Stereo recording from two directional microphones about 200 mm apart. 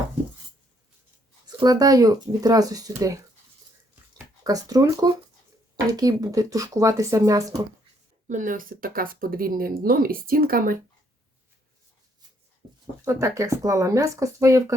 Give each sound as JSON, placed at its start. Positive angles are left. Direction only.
{"t": 1.5, "sound": "speech", "side_deg": -20}
{"t": 4.4, "sound": "speech", "side_deg": -20}
{"t": 8.3, "sound": "speech", "side_deg": -40}
{"t": 13.1, "sound": "speech", "side_deg": -15}